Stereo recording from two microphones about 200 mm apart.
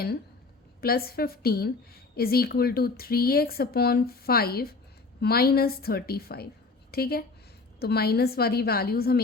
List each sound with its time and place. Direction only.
0.8 s a woman's voice: 50° left (ahead or behind)